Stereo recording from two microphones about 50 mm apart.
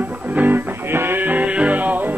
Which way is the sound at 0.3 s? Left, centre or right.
Right.